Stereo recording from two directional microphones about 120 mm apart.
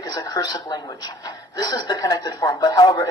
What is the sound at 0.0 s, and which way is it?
Speech, 35° left (ahead or behind).